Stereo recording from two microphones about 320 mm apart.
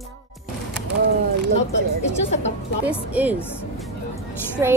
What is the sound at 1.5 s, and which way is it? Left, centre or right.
Speech, left.